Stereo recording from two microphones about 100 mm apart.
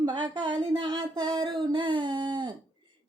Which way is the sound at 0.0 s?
45° right (ahead or behind).